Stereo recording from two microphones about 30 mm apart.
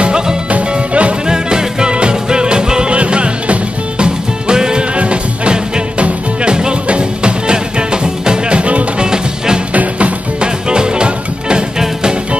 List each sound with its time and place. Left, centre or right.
0.0 s music: right
0.5 s music: right
1.2 s music: right
3.0 s music: right
4.0 s music: right
4.9 s music: right
9.0 s music: right
9.8 s music: right
10.4 s music: right